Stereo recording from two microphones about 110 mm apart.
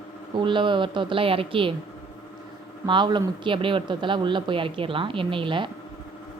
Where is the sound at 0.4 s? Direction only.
45° right (ahead or behind).